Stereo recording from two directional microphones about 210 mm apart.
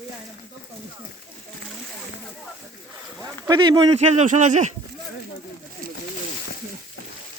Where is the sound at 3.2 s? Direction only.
15° right (ahead or behind); by 4.7 s 35° right (ahead or behind).